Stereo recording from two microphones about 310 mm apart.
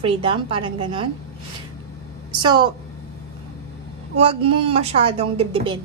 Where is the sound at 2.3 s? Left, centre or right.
Centre.